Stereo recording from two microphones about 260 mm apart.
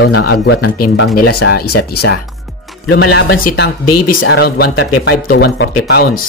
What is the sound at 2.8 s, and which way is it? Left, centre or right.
Speech, left.